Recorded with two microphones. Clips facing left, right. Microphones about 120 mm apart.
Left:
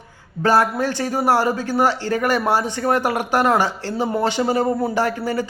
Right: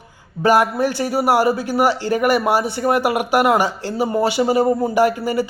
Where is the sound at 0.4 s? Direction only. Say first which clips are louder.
Right 2 dB; 15° right (ahead or behind).